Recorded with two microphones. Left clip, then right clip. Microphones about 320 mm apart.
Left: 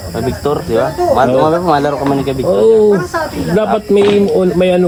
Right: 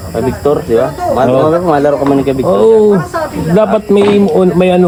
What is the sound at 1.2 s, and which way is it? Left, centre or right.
Speech, centre.